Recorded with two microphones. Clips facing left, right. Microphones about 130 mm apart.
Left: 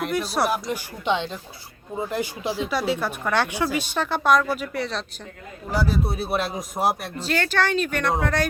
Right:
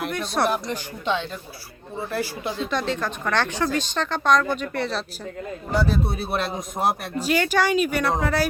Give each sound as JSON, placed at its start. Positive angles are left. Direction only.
{"t": 0.0, "sound": "speech", "side_deg": 5}
{"t": 1.0, "sound": "speech", "side_deg": 20}
{"t": 7.2, "sound": "speech", "side_deg": -10}